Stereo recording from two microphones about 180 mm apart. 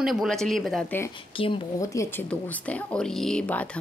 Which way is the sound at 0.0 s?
Centre (ahead or behind).